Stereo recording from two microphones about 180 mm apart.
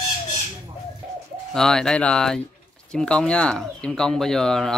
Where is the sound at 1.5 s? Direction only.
5° left (ahead or behind).